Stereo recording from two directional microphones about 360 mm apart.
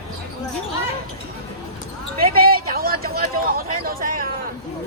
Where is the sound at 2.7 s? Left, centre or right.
Right.